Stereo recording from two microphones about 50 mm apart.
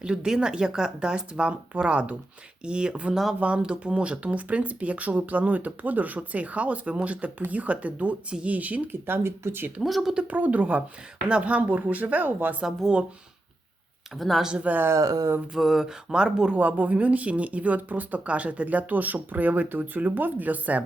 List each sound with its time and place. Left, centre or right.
0.0 s speech: centre; by 9.7 s right
9.8 s speech: centre
10.2 s speech: right
14.2 s speech: centre
14.6 s speech: right
14.8 s speech: right
15.5 s speech: centre
16.6 s speech: right